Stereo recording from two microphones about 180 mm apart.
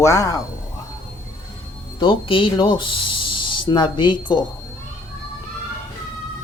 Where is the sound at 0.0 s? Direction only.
20° left (ahead or behind).